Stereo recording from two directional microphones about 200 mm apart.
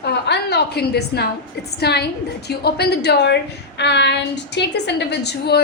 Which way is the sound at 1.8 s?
55° left (ahead or behind).